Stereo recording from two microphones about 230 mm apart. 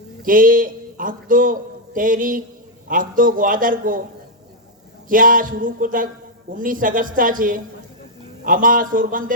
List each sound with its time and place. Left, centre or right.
0.2 s a man's voice: right
5.0 s a man's voice: right